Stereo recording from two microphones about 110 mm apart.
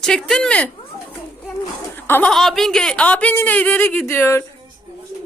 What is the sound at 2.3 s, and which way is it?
Speech, centre (ahead or behind).